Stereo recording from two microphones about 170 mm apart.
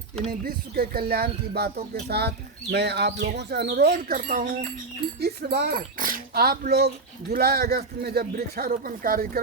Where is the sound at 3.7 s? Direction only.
65° right (ahead or behind).